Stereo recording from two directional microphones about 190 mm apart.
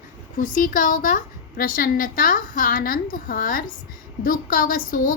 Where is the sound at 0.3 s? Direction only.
45° left (ahead or behind).